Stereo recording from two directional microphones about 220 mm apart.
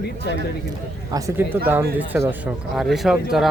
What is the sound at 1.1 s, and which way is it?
Speech, 15° right (ahead or behind).